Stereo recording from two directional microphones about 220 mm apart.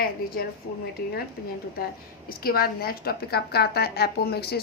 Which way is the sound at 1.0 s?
40° left (ahead or behind).